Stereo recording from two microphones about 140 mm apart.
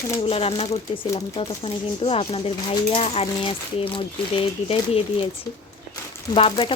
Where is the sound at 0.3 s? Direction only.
45° left (ahead or behind).